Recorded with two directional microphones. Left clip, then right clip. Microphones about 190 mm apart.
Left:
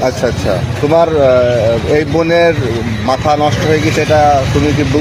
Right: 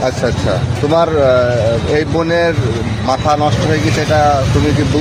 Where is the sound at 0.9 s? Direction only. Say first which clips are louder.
Left 2 dB; 35° left (ahead or behind).